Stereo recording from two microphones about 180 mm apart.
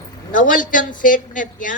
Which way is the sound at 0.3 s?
50° left (ahead or behind).